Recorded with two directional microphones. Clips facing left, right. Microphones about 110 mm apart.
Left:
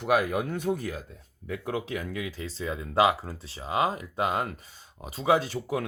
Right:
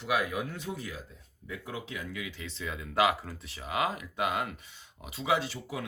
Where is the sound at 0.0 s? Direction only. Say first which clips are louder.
Left 6 dB; 50° left (ahead or behind).